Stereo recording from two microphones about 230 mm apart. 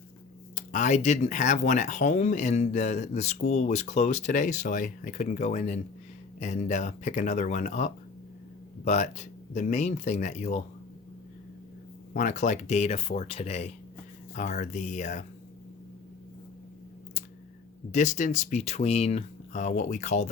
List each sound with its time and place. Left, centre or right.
0.5 s speech: left
12.1 s speech: left
17.9 s speech: left